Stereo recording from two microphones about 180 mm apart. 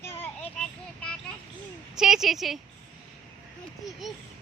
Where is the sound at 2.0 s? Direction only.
Centre (ahead or behind).